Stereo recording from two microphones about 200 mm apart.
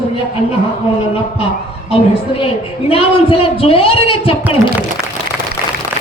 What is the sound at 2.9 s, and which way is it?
A woman's voice, 30° left (ahead or behind).